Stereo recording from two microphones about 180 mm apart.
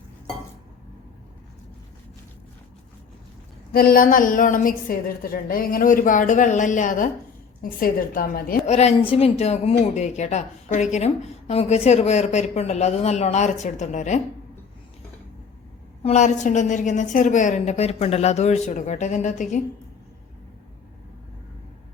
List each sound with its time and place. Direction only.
3.7 s a woman's voice: 55° left (ahead or behind)
8.6 s a woman's voice: 40° left (ahead or behind)
16.0 s a woman's voice: 40° left (ahead or behind)